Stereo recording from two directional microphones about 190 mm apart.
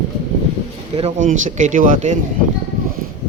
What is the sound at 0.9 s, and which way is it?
Speech, 35° right (ahead or behind).